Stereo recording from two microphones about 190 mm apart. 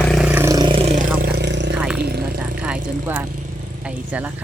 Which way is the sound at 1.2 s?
60° right (ahead or behind).